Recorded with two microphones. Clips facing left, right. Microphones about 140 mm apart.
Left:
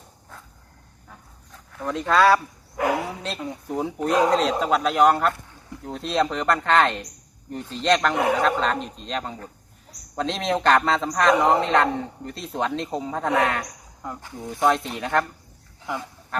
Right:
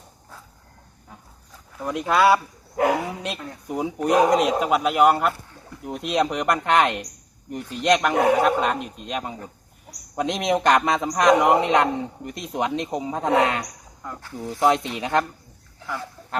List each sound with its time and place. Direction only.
1.5 s speech: 10° right (ahead or behind)
3.3 s speech: 20° left (ahead or behind)
3.7 s a man's voice: 10° right (ahead or behind)
14.0 s speech: 15° left (ahead or behind)
14.5 s speech: 20° right (ahead or behind)